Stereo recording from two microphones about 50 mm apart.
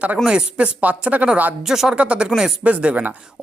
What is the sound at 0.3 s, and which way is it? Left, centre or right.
Speech, centre.